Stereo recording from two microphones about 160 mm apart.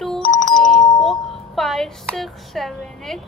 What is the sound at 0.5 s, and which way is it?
Music, centre (ahead or behind).